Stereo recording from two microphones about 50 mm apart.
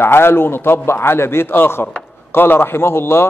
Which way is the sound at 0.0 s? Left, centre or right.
Left.